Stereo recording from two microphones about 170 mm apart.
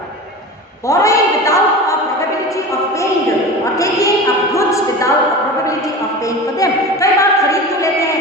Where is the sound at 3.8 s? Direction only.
20° left (ahead or behind).